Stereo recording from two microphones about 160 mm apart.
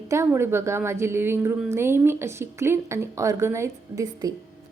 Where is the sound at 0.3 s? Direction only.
15° right (ahead or behind).